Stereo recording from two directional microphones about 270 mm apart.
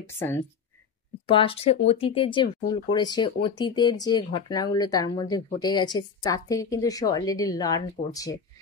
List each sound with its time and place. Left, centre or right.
1.2 s speech: centre